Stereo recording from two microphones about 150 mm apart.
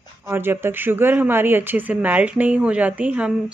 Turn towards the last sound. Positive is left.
turn(degrees=-10)  # may be behind; listen again after turning